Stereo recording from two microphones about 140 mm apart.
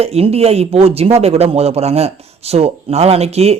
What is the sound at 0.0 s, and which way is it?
Speech, 45° right (ahead or behind).